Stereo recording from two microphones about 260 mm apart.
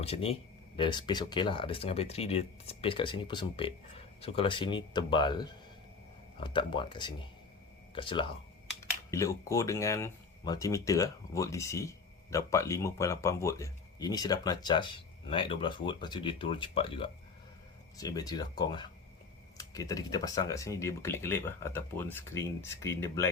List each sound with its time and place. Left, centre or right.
0.0 s speech: left